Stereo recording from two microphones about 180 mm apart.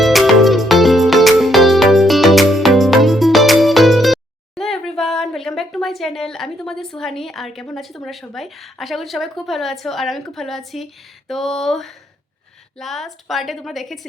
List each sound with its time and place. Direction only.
0.0 s music: centre (ahead or behind)
9.8 s a woman's voice: centre (ahead or behind)